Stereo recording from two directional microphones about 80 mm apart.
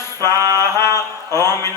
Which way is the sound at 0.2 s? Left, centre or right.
Right.